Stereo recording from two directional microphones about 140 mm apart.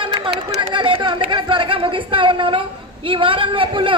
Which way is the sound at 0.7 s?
35° right (ahead or behind).